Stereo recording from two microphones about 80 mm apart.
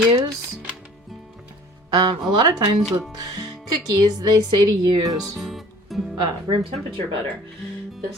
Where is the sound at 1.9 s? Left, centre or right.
Right.